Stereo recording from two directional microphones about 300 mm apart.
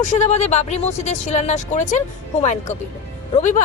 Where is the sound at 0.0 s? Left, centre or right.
Left.